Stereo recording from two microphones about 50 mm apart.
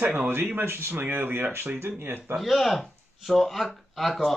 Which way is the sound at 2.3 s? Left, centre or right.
Centre.